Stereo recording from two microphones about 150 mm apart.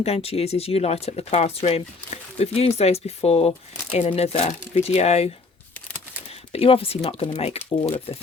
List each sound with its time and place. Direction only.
0.0 s speech: 40° left (ahead or behind)
6.5 s speech: 40° left (ahead or behind)